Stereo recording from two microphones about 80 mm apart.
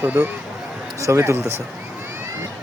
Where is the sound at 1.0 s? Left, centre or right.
Right.